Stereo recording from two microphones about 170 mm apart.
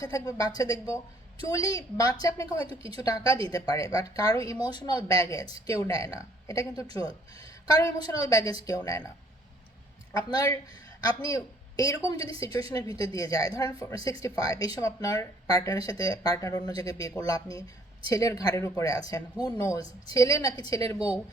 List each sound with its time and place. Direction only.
0.0 s speech: 20° left (ahead or behind)
10.2 s speech: 20° left (ahead or behind)